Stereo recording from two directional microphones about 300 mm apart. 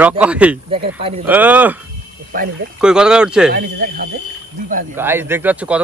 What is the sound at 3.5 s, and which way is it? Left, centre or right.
Speech, right.